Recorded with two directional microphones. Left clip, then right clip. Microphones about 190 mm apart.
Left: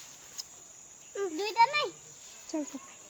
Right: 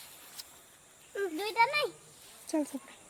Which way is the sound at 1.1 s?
35° right (ahead or behind).